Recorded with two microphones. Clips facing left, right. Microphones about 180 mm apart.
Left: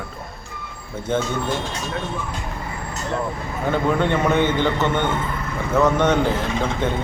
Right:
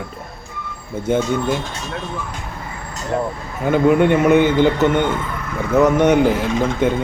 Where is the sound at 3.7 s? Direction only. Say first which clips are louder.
Right 7 dB; 10° right (ahead or behind).